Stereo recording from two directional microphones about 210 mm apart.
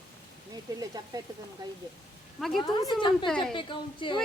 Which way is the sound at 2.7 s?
20° left (ahead or behind).